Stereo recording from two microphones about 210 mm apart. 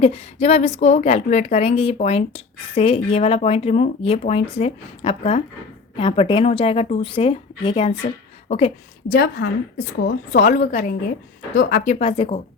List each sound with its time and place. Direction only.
0.0 s a woman's voice: 30° left (ahead or behind)
9.0 s a woman's voice: 50° left (ahead or behind)
11.9 s a woman's voice: 25° left (ahead or behind)